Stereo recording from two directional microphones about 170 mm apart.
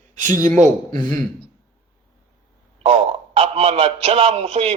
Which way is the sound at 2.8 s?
35° right (ahead or behind).